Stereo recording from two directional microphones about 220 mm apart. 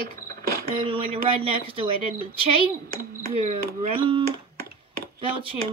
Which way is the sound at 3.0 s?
35° right (ahead or behind).